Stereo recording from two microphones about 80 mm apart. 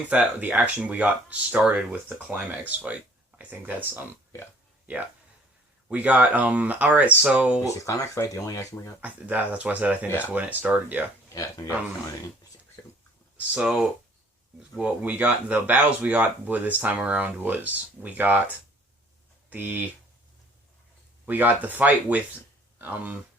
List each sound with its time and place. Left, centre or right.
0.1 s speech: centre
5.9 s speech: centre
7.6 s speech: left
9.0 s speech: centre
11.3 s speech: left
12.8 s whispering: left
13.5 s speech: centre
21.2 s speech: right